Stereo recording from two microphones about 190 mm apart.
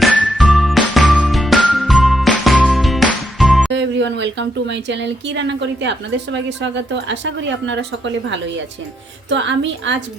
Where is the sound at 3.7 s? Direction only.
70° right (ahead or behind).